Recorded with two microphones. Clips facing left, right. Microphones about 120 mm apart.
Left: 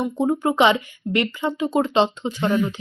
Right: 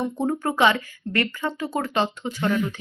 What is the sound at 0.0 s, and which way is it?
Speech, 15° left (ahead or behind).